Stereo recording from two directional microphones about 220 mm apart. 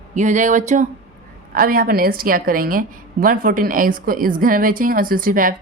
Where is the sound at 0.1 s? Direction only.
35° right (ahead or behind).